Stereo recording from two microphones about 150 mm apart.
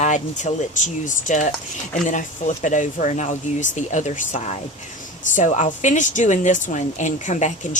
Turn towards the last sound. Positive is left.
turn(degrees=55)  # may be behind; listen again after turning